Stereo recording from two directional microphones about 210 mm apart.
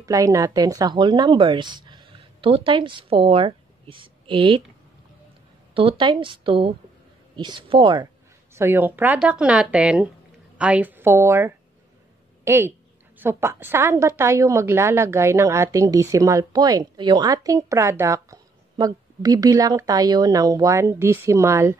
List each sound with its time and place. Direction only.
0.0 s speech: 15° right (ahead or behind)
5.8 s speech: 25° right (ahead or behind)
8.5 s a woman's voice: 10° right (ahead or behind)